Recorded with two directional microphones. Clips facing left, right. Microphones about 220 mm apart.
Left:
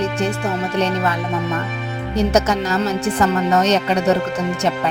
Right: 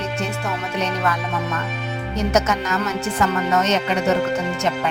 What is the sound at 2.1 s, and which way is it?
Speech, 35° left (ahead or behind).